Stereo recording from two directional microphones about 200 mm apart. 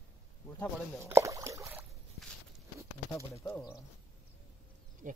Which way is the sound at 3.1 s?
10° left (ahead or behind).